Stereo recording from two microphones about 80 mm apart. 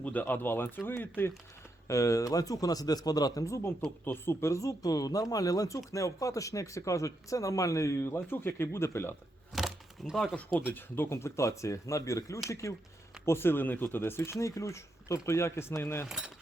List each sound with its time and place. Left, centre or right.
0.0 s speech: centre
1.9 s speech: left
4.0 s speech: left
8.0 s speech: left
9.5 s a sound: centre
10.3 s speech: left
16.0 s speech: centre